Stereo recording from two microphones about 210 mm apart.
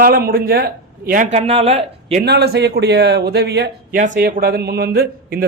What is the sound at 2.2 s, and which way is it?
A man's voice, 50° right (ahead or behind).